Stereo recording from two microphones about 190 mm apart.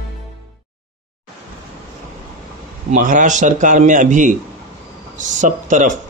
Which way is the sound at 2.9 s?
45° right (ahead or behind).